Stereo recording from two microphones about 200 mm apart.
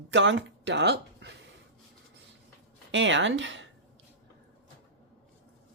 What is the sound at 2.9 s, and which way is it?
Speech, 65° right (ahead or behind).